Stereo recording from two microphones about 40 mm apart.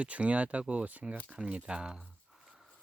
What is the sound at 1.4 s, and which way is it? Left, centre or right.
Speech, right.